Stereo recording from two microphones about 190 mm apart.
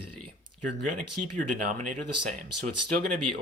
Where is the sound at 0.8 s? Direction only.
40° right (ahead or behind).